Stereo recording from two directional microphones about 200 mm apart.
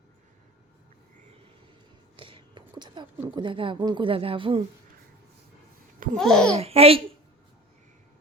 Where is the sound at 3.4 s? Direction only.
25° right (ahead or behind).